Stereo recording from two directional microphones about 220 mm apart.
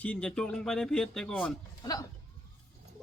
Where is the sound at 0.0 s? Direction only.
5° left (ahead or behind).